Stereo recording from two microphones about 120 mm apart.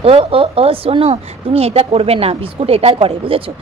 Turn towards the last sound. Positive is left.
turn(degrees=-50)  # may be behind; listen again after turning